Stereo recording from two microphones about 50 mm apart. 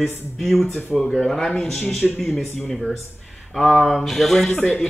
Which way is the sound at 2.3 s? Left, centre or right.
Centre.